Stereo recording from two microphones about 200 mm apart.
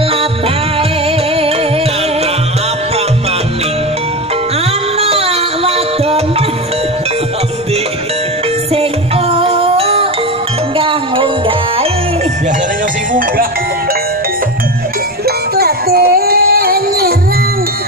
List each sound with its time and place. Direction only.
5.0 s music: 30° right (ahead or behind)
8.7 s music: 30° right (ahead or behind)
15.2 s music: 50° right (ahead or behind)